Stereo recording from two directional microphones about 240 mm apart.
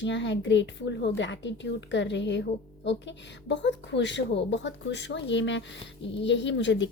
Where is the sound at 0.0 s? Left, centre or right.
Left.